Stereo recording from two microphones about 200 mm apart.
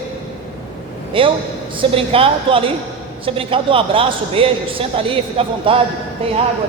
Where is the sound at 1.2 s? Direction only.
25° right (ahead or behind).